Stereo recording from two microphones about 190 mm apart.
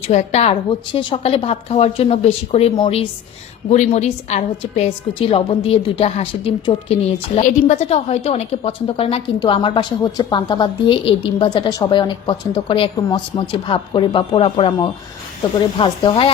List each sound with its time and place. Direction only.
0.1 s a woman's voice: 35° left (ahead or behind)